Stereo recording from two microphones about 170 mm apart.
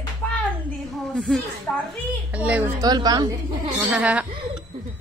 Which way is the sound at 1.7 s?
10° left (ahead or behind).